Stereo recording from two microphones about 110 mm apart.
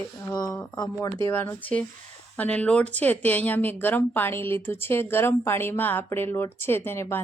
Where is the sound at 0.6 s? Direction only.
40° left (ahead or behind).